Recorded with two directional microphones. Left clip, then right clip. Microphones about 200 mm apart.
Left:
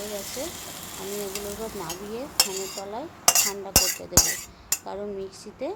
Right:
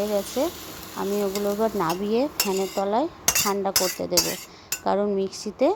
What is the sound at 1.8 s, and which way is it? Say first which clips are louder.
Speech: right 11 dB; 40° right (ahead or behind).